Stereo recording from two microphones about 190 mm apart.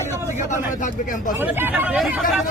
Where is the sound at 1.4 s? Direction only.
10° right (ahead or behind).